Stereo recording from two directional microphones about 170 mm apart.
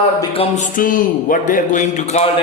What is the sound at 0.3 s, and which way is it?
A man's voice, 45° left (ahead or behind).